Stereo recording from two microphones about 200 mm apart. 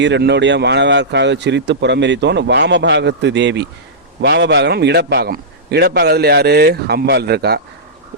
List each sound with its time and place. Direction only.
0.0 s speech: 60° right (ahead or behind)